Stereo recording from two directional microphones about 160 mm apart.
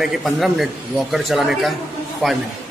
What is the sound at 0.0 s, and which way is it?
A man's voice, centre (ahead or behind).